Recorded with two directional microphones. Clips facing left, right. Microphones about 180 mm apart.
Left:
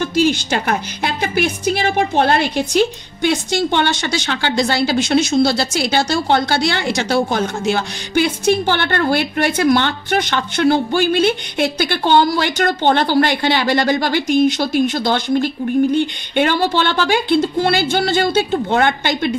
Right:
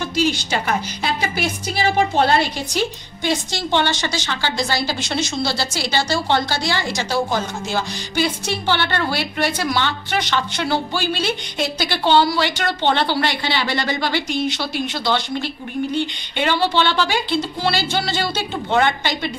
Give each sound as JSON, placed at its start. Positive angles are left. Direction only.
{"t": 0.1, "sound": "a woman's voice", "side_deg": 50}